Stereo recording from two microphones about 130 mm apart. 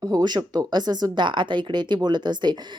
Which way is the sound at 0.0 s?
30° right (ahead or behind).